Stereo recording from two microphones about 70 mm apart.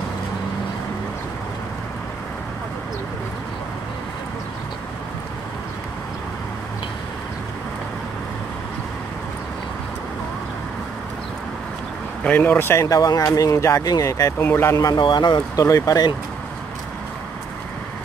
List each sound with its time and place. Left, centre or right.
12.2 s speech: left
12.8 s speech: left
14.4 s speech: left
14.7 s speech: left
15.6 s speech: left